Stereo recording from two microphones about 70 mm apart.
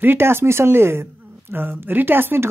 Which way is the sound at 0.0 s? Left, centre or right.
Right.